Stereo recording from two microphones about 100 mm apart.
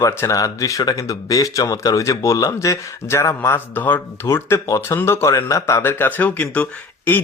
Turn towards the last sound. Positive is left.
turn(degrees=15)  # may be behind; listen again after turning